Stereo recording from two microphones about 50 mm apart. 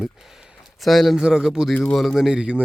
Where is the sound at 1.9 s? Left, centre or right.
Centre.